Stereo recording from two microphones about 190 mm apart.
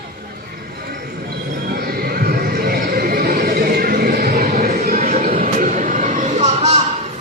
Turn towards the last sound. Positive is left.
turn(degrees=-35)  # may be behind; listen again after turning